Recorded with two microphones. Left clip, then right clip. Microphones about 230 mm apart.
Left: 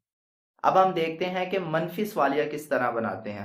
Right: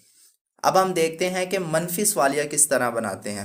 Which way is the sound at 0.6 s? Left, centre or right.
Right.